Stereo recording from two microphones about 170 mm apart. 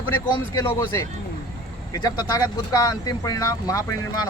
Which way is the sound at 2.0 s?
20° left (ahead or behind).